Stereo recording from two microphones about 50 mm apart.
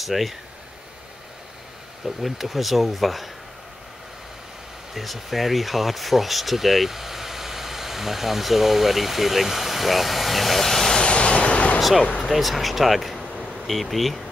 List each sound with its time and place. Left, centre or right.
0.0 s speech: centre
2.0 s speech: centre
4.9 s speech: centre
11.1 s vehicle: left
12.2 s speech: centre